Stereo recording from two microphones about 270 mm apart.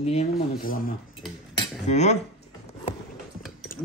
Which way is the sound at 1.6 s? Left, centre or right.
Left.